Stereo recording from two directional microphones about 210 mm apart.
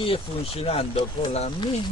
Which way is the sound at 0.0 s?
25° left (ahead or behind).